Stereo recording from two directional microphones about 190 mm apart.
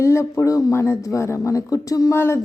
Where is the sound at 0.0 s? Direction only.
15° left (ahead or behind).